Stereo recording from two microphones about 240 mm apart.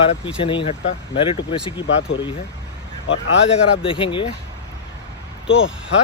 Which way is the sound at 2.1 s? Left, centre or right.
Left.